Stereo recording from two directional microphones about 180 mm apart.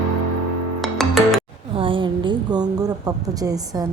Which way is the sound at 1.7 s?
30° right (ahead or behind).